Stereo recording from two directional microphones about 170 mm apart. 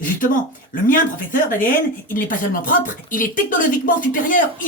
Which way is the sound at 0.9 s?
50° left (ahead or behind).